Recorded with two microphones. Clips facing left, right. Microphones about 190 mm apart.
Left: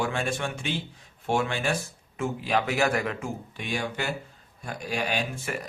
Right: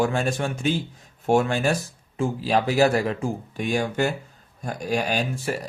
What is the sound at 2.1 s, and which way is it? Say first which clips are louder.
Speech: right 4 dB; 30° right (ahead or behind).